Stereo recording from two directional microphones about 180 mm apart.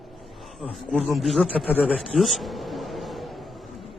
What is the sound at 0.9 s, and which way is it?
Speech, centre (ahead or behind).